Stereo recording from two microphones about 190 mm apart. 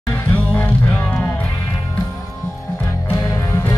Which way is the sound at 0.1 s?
10° left (ahead or behind).